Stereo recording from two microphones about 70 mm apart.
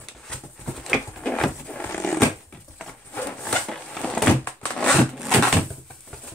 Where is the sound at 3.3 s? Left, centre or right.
Centre.